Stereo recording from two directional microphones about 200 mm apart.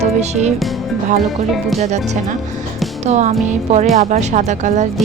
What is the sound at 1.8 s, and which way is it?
A woman's voice, 35° right (ahead or behind).